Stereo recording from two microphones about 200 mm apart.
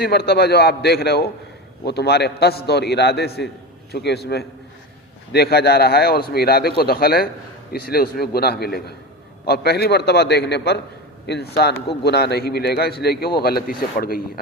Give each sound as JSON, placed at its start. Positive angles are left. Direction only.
{"t": 0.0, "sound": "a man's voice", "side_deg": 50}